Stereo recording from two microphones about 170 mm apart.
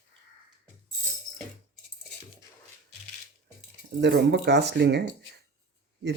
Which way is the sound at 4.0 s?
90° right.